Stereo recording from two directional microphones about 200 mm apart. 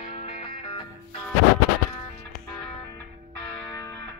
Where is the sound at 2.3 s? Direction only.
5° left (ahead or behind).